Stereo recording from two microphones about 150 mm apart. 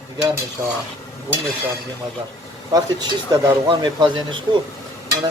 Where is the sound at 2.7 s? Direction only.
25° right (ahead or behind).